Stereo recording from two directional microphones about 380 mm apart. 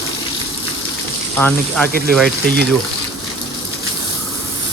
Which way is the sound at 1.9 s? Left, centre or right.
Right.